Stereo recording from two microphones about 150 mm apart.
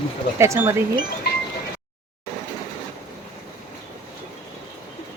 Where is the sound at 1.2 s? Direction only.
90° left.